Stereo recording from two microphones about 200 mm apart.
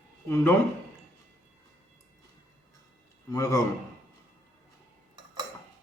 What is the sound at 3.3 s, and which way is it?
Speech, 15° left (ahead or behind).